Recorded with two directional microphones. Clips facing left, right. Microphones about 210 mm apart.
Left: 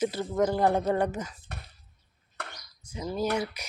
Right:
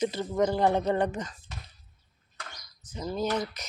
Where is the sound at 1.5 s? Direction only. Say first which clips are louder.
Left 2 dB; 60° left (ahead or behind).